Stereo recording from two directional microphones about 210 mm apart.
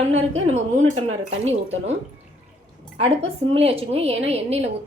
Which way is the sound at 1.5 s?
30° right (ahead or behind).